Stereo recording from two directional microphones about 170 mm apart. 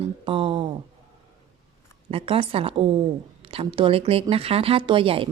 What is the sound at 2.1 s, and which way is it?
Speech, 30° right (ahead or behind).